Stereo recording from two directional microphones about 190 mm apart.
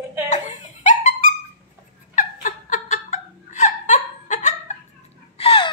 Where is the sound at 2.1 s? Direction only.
45° left (ahead or behind).